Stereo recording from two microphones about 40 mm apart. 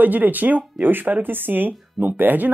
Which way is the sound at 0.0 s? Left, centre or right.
Right.